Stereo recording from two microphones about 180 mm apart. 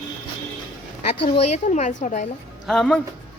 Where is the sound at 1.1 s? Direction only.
35° left (ahead or behind).